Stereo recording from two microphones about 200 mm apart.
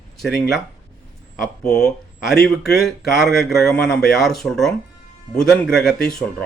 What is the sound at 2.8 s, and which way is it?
Speech, centre (ahead or behind).